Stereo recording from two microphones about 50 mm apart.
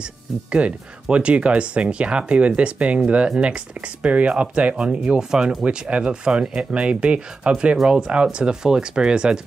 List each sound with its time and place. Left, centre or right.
0.0 s speech: right
7.7 s speech: centre